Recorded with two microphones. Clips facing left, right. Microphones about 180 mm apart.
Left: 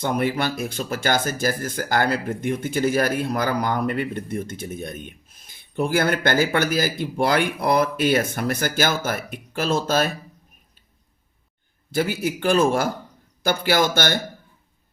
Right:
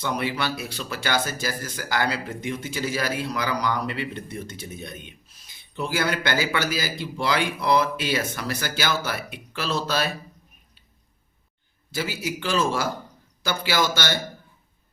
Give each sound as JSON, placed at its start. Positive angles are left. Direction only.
{"t": 0.0, "sound": "speech", "side_deg": 50}
{"t": 11.9, "sound": "speech", "side_deg": 55}